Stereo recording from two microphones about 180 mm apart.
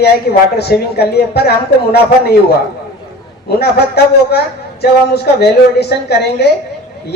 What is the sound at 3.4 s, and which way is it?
Speech, 60° left (ahead or behind).